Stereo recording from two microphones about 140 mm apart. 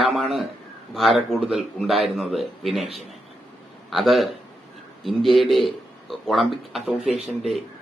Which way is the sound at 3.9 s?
Centre (ahead or behind).